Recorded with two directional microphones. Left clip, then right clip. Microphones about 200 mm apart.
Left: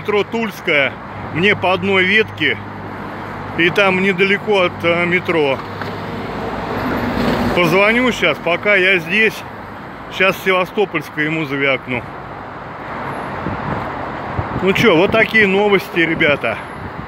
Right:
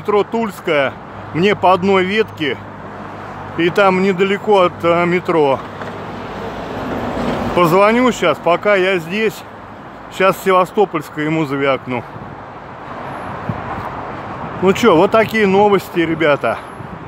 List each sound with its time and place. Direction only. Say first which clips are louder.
0.0 s speech: right 2 dB; 15° right (ahead or behind)
7.5 s speech: right 2 dB; 15° right (ahead or behind)
14.6 s speech: right 1 dB; 20° right (ahead or behind)